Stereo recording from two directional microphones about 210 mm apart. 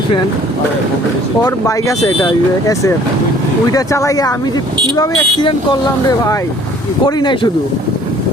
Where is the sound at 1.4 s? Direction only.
15° left (ahead or behind).